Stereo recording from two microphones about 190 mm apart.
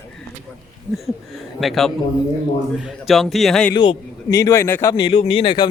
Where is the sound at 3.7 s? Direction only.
25° left (ahead or behind).